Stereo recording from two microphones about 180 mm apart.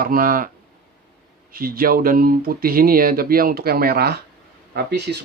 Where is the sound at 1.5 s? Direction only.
55° right (ahead or behind).